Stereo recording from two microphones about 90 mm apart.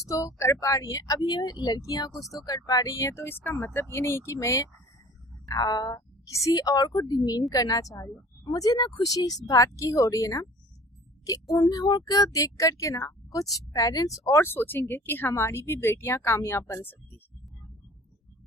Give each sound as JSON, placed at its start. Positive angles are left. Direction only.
{"t": 0.0, "sound": "a woman's voice", "side_deg": 40}
{"t": 2.3, "sound": "a woman's voice", "side_deg": 40}
{"t": 14.4, "sound": "speech", "side_deg": 25}